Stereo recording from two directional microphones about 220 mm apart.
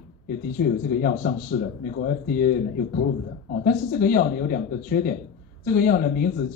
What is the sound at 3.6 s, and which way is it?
Speech, 40° left (ahead or behind).